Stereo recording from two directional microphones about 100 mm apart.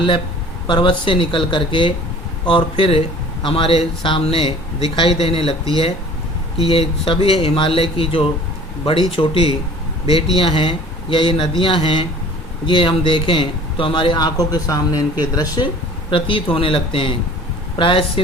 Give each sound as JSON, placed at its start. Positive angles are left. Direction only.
{"t": 0.7, "sound": "speech", "side_deg": 55}
{"t": 6.6, "sound": "speech", "side_deg": 70}